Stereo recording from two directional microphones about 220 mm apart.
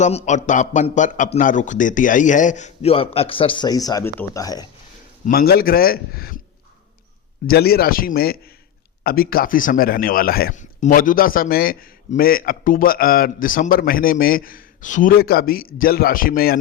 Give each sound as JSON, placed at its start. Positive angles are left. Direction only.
{"t": 0.0, "sound": "a man's voice", "side_deg": 30}
{"t": 5.2, "sound": "a man's voice", "side_deg": 45}
{"t": 7.4, "sound": "a man's voice", "side_deg": 45}